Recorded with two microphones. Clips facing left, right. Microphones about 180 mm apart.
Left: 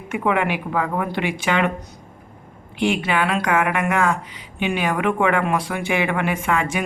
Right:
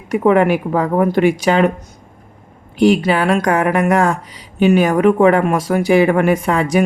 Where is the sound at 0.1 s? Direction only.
40° right (ahead or behind).